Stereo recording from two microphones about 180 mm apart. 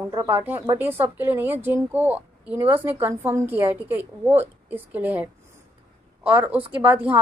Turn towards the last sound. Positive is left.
turn(degrees=-10)  # may be behind; listen again after turning